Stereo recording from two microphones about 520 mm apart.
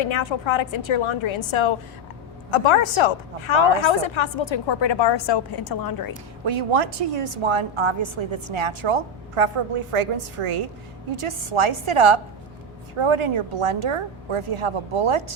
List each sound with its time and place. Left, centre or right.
0.0 s a woman's voice: left
5.6 s a woman's voice: left
6.4 s a woman's voice: right